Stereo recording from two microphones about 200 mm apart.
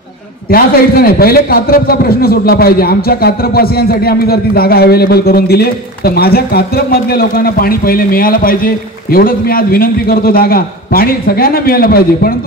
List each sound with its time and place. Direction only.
0.5 s a man's voice: 50° left (ahead or behind)